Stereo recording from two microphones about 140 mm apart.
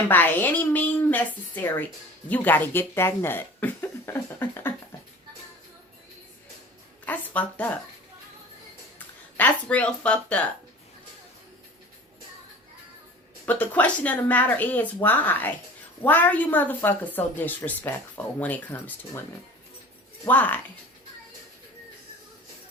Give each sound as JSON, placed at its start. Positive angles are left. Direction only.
{"t": 0.1, "sound": "speech", "side_deg": 15}
{"t": 7.0, "sound": "speech", "side_deg": 10}
{"t": 9.4, "sound": "speech", "side_deg": 10}
{"t": 13.4, "sound": "speech", "side_deg": 10}
{"t": 20.2, "sound": "speech", "side_deg": 10}